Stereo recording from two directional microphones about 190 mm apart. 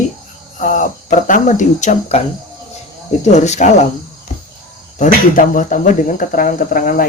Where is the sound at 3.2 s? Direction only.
35° left (ahead or behind).